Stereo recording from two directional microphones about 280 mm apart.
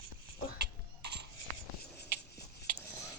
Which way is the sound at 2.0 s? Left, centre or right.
Left.